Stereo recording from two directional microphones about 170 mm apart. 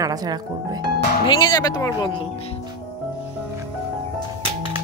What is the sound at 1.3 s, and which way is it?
Speech, 25° left (ahead or behind).